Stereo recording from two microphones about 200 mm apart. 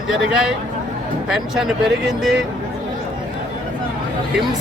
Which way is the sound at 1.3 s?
Centre (ahead or behind).